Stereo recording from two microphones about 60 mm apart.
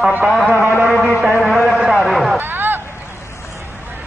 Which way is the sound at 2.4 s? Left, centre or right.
Right.